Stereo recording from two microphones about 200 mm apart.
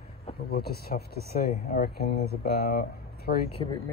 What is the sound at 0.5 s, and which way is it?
Speech, 50° left (ahead or behind).